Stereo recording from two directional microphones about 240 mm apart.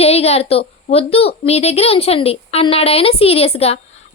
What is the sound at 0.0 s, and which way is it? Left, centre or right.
A child's voice, left.